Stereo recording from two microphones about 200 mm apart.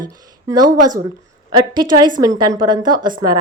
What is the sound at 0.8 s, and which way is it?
Speech, 40° right (ahead or behind).